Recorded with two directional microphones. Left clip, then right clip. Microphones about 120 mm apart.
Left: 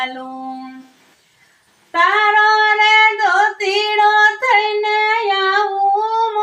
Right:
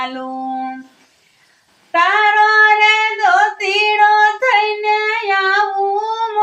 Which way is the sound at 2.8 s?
15° right (ahead or behind).